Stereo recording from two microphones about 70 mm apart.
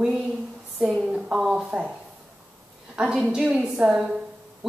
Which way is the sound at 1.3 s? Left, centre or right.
Right.